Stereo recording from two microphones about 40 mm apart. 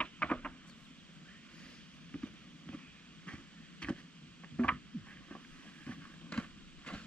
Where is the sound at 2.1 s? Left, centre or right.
Left.